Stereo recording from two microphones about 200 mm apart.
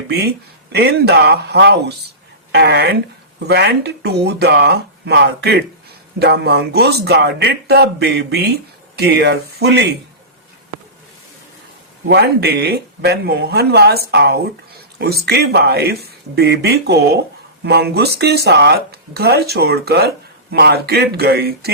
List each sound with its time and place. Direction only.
0.7 s a man's voice: 55° right (ahead or behind)
12.0 s speech: 55° right (ahead or behind)